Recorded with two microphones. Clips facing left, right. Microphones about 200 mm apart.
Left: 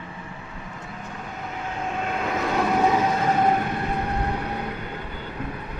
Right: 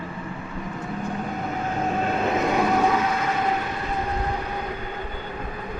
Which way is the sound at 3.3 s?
45° left (ahead or behind).